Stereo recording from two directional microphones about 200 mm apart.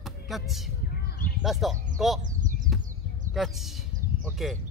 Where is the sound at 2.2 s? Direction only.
40° right (ahead or behind).